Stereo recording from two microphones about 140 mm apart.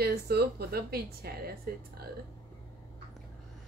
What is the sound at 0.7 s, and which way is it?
Speech, 90° right.